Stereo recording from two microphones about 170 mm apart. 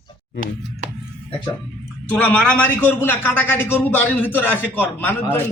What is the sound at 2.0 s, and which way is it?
A man's voice, 5° left (ahead or behind).